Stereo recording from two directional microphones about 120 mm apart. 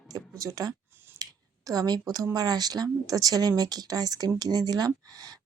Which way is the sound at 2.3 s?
35° right (ahead or behind).